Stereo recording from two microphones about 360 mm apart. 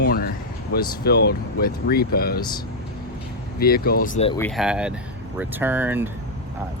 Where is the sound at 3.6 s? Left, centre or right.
Left.